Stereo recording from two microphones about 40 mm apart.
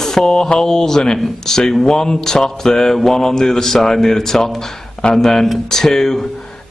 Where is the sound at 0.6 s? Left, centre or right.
Centre.